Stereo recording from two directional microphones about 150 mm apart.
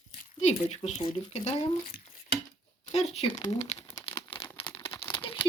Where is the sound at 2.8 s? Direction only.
45° left (ahead or behind).